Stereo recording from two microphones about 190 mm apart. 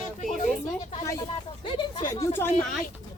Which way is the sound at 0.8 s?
30° left (ahead or behind).